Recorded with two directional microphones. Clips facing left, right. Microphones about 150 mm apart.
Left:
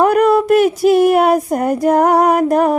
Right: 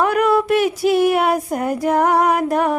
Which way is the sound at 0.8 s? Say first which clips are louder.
Left 5 dB; 45° left (ahead or behind).